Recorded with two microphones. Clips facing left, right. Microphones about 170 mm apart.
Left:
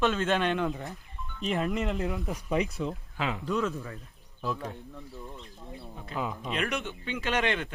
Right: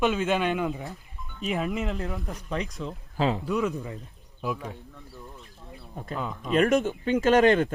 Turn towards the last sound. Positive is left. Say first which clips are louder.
# right 10 dB
turn(degrees=-40)  # may be behind; listen again after turning